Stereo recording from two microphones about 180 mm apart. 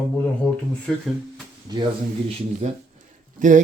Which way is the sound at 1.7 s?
25° right (ahead or behind).